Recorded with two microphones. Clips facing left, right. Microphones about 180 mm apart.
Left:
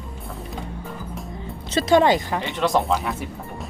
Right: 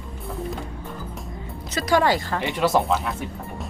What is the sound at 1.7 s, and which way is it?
Speech, 25° left (ahead or behind).